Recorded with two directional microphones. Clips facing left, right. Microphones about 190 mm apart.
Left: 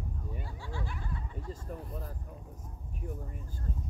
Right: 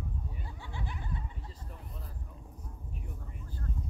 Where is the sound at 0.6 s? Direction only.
20° right (ahead or behind).